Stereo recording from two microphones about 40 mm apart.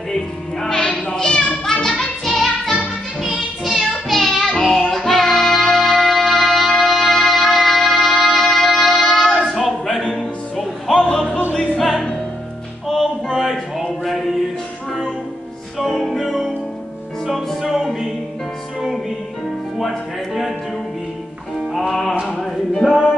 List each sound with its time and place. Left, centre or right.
0.1 s music: centre
1.0 s cat: left
2.2 s music: centre
3.2 s music: centre
9.6 s a capella: centre
10.9 s music: centre
11.5 s music: left
12.8 s a sound: centre
15.9 s music: centre
17.6 s music: centre
22.3 s a sound: centre
22.8 s music: centre